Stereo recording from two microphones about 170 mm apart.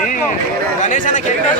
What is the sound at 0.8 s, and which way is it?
Speech, 50° left (ahead or behind).